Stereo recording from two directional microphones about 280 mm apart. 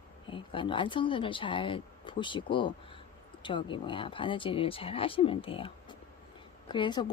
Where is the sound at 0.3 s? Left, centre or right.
Centre.